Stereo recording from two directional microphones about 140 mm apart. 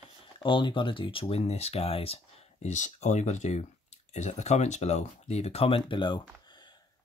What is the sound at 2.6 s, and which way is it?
Speech, 55° left (ahead or behind).